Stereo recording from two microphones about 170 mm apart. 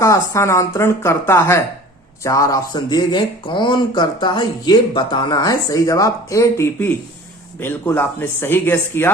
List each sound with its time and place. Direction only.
0.0 s speech: 15° left (ahead or behind)